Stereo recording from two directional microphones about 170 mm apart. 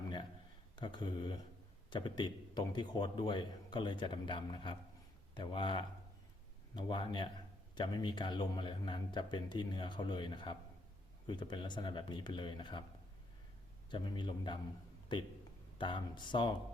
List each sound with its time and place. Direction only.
0.8 s a man's voice: 25° left (ahead or behind)
13.9 s a man's voice: 25° left (ahead or behind)